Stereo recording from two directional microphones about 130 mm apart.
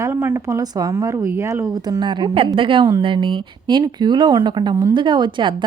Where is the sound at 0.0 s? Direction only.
20° right (ahead or behind).